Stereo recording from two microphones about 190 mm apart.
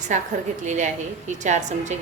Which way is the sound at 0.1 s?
40° right (ahead or behind).